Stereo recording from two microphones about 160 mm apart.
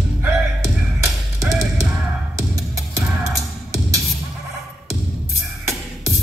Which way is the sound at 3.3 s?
20° right (ahead or behind).